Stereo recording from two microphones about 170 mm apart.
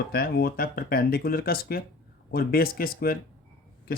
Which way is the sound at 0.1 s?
65° left (ahead or behind).